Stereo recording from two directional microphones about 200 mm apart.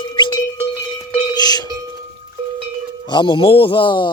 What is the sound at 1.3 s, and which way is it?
Cowbell, 20° left (ahead or behind).